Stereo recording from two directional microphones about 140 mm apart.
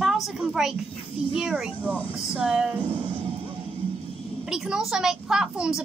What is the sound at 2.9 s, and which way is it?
Music, 40° right (ahead or behind).